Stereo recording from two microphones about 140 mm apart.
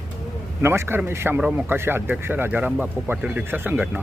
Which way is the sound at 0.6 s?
15° right (ahead or behind).